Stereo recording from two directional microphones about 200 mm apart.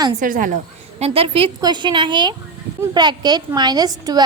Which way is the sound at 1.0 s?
30° right (ahead or behind).